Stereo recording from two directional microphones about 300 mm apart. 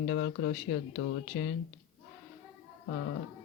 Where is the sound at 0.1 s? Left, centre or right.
Left.